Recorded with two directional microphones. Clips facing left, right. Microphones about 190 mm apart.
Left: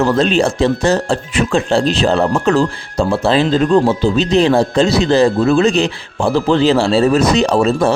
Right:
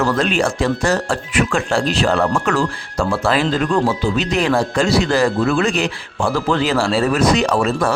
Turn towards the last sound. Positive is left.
turn(degrees=25)  # may be behind; listen again after turning